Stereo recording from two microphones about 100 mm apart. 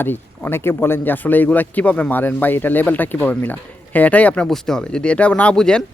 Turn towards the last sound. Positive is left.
turn(degrees=10)  # may be behind; listen again after turning